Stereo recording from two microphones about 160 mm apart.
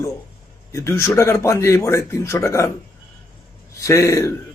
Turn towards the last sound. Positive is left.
turn(degrees=20)  # may be behind; listen again after turning